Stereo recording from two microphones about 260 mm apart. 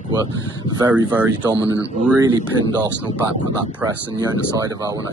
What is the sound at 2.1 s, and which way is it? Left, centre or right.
Speech, centre.